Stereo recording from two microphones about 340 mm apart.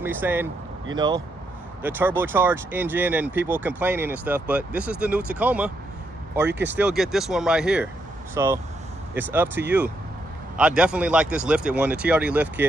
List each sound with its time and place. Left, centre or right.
0.0 s speech: centre